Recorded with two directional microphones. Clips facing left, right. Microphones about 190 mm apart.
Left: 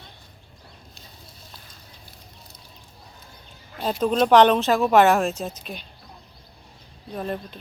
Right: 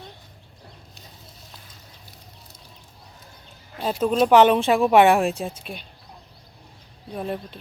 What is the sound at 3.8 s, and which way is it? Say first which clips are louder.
Speech: right 1 dB; 5° right (ahead or behind).